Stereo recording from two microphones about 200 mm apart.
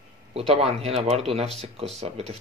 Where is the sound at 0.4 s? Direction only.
30° right (ahead or behind).